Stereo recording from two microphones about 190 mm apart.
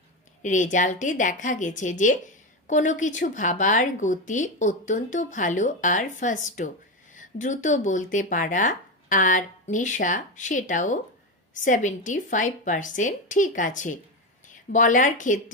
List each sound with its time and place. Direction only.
0.4 s a woman's voice: 40° left (ahead or behind)